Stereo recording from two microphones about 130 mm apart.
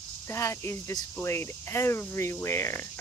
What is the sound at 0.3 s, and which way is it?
Speech, 20° left (ahead or behind).